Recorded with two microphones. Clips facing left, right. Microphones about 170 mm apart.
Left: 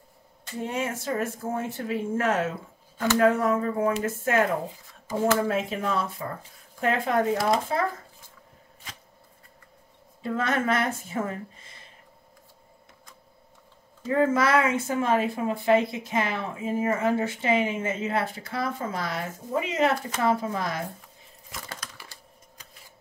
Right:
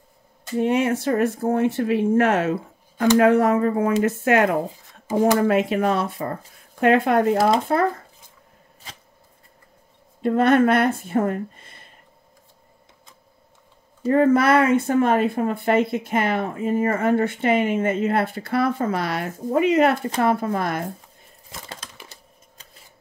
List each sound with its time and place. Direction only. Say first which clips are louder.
0.6 s speech: right 10 dB; 70° right (ahead or behind)
10.2 s speech: right 10 dB; 60° right (ahead or behind)
14.0 s speech: right 6 dB; 60° right (ahead or behind)
21.5 s a sound: right 1 dB; 25° right (ahead or behind)